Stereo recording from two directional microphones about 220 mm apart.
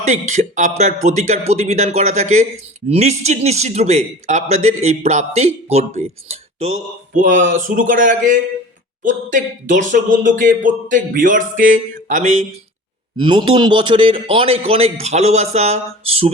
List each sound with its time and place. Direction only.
0.0 s a man's voice: 35° right (ahead or behind)
13.1 s a man's voice: 20° right (ahead or behind)